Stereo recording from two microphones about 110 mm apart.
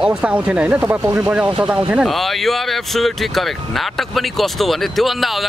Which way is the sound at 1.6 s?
10° right (ahead or behind).